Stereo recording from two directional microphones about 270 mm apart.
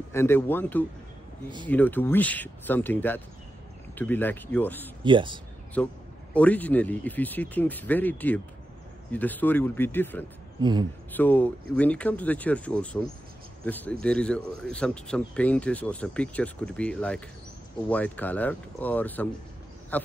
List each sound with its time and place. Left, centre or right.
0.1 s speech: centre
5.0 s speech: centre
5.8 s speech: centre
10.6 s speech: centre
11.1 s speech: centre